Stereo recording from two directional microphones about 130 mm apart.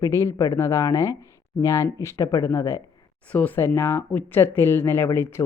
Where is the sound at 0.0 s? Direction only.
20° left (ahead or behind).